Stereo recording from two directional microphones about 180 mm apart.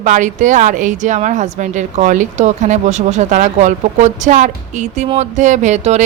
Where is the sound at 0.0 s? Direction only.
45° right (ahead or behind).